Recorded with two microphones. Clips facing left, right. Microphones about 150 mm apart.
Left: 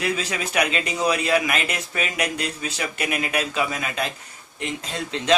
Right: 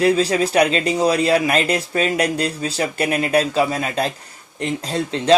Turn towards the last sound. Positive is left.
turn(degrees=-35)  # may be behind; listen again after turning